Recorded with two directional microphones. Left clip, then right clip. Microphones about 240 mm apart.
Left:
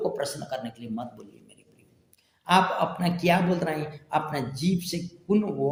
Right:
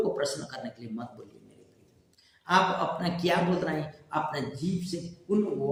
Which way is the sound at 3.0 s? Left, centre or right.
Left.